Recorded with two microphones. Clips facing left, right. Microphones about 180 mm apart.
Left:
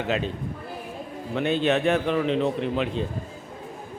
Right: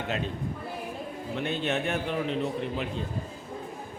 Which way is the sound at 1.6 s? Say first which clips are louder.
Left 8 dB; 90° left.